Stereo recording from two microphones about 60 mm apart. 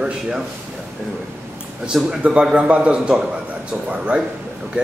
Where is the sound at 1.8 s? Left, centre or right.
Centre.